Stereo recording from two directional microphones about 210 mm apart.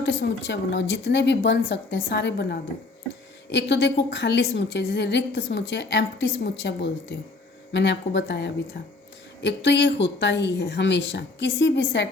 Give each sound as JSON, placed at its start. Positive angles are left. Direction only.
{"t": 0.0, "sound": "a woman's voice", "side_deg": 60}